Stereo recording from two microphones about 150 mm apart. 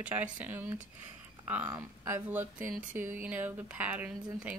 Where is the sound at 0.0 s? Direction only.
10° right (ahead or behind).